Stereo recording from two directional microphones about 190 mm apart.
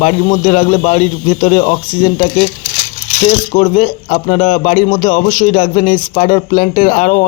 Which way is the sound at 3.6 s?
40° left (ahead or behind).